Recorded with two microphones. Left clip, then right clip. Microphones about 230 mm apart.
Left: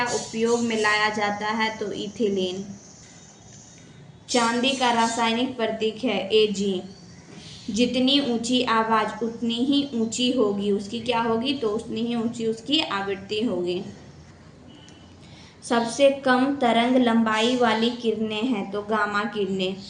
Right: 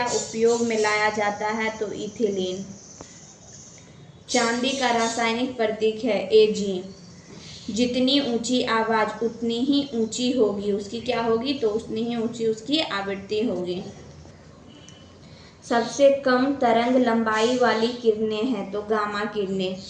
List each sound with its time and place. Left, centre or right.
0.3 s a woman's voice: centre
4.3 s a woman's voice: centre
7.7 s a woman's voice: centre
16.0 s a woman's voice: centre